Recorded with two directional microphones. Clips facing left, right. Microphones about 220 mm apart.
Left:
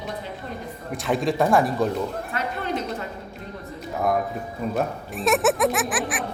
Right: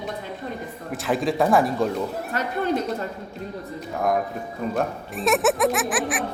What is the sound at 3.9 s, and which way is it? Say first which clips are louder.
Music: even; centre (ahead or behind).